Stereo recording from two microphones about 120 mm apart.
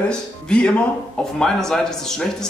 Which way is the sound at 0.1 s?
10° left (ahead or behind).